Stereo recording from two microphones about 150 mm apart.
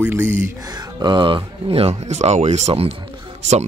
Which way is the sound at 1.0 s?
30° right (ahead or behind).